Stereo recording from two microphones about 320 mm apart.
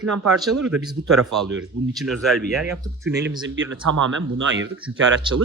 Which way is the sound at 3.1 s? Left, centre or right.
Right.